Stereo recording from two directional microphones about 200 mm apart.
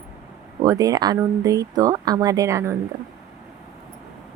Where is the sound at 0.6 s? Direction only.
20° right (ahead or behind).